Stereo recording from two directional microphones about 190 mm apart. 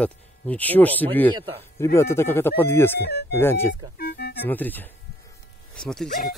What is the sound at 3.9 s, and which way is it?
Music, 55° left (ahead or behind).